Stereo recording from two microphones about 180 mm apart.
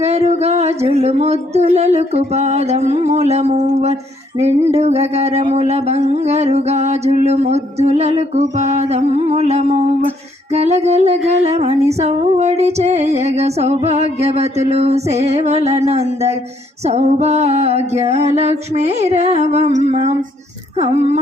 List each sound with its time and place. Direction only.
0.0 s music: 35° right (ahead or behind)